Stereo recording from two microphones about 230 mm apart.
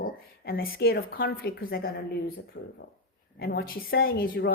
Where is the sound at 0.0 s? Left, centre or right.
Left.